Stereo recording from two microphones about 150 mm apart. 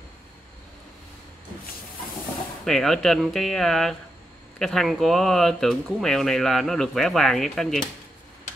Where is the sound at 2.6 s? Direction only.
Centre (ahead or behind).